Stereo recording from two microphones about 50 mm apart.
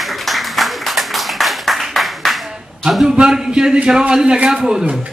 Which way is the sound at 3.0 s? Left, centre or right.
Centre.